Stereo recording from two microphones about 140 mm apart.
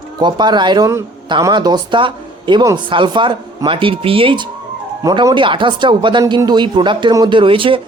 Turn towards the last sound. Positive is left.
turn(degrees=-40)  # may be behind; listen again after turning